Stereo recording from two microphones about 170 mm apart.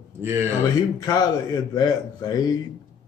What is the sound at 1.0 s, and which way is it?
A man's voice, 20° left (ahead or behind).